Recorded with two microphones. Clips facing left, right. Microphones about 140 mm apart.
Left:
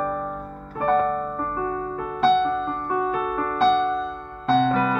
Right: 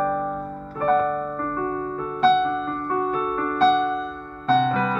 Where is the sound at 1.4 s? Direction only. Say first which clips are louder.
Right 1 dB; 10° left (ahead or behind).